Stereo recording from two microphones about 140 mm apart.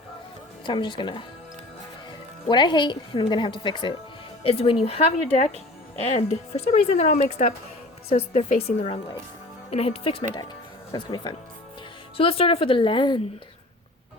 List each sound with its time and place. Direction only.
0.6 s a woman's voice: 35° left (ahead or behind)
2.5 s a woman's voice: 35° left (ahead or behind)